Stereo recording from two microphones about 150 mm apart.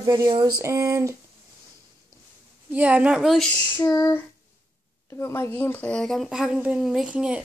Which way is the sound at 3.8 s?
20° left (ahead or behind).